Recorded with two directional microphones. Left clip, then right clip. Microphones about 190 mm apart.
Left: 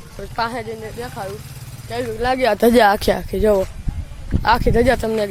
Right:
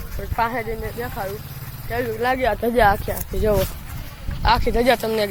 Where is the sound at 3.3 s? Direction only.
40° left (ahead or behind).